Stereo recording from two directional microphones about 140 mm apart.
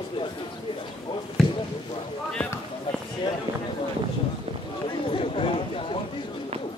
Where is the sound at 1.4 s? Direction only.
Centre (ahead or behind).